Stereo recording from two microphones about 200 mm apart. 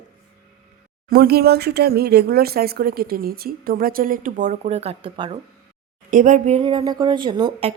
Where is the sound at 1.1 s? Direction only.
50° right (ahead or behind); by 5.4 s 25° right (ahead or behind).